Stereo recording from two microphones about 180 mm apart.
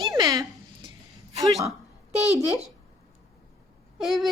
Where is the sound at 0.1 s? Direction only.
20° right (ahead or behind).